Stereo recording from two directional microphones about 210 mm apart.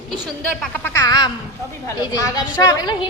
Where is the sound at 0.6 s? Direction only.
5° left (ahead or behind).